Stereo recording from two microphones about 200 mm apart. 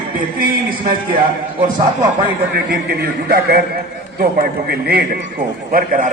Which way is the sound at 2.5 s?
50° right (ahead or behind).